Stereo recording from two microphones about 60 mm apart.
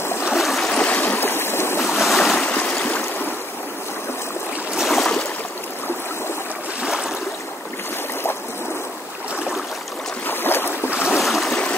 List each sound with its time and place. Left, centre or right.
0.0 s stream: left
0.4 s stream: centre
0.7 s stream: left
1.9 s waves: centre
2.4 s stream: left
4.8 s a sound: centre
6.8 s a sound: centre
10.2 s boat: left
10.9 s boat: centre
11.1 s a sound: centre